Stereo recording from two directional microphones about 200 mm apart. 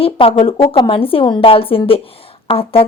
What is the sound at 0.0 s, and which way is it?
Speech, 25° left (ahead or behind).